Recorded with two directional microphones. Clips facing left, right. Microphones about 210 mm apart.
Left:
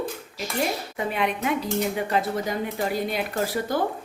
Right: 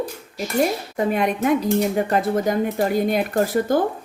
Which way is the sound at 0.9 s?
45° right (ahead or behind).